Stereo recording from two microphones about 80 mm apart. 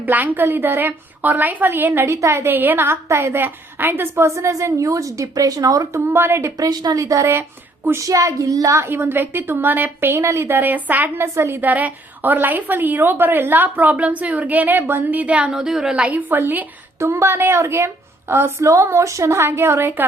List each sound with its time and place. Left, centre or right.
0.0 s a woman's voice: right
4.4 s a woman's voice: right
6.1 s a woman's voice: right
6.6 s a woman's voice: right
7.0 s a woman's voice: right
8.0 s a woman's voice: right
8.8 s a woman's voice: right
10.2 s a woman's voice: right
11.7 s a woman's voice: centre
17.0 s a woman's voice: right
18.6 s a woman's voice: right